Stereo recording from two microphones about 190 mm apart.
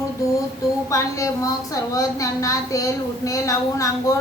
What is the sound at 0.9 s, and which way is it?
A woman's voice, 15° left (ahead or behind).